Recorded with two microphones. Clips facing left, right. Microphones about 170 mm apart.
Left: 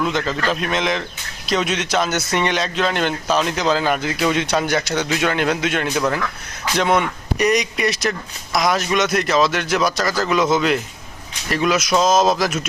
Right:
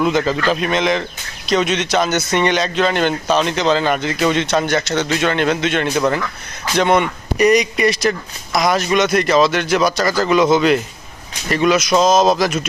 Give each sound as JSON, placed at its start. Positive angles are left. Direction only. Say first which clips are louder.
{"t": 0.0, "sound": "a man's voice", "louder": "right 5 dB", "side_deg": -5}